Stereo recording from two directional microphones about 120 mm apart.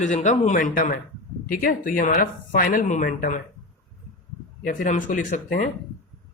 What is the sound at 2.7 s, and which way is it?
Speech, 90° left.